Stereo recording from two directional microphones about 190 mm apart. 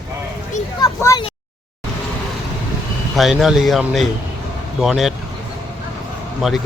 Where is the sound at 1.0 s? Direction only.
20° left (ahead or behind).